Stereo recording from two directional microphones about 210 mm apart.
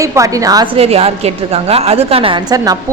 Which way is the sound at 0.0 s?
15° right (ahead or behind).